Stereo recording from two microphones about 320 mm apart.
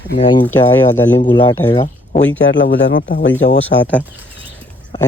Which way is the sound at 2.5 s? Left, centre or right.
Left.